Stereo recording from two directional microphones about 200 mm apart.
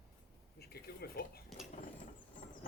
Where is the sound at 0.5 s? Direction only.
50° left (ahead or behind).